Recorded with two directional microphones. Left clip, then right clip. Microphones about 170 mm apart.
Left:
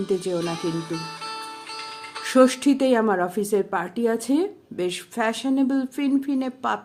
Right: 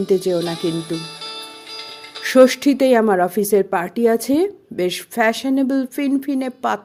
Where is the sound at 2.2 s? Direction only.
35° right (ahead or behind).